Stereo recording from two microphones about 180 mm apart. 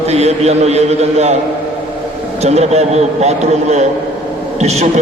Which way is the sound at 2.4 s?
35° right (ahead or behind).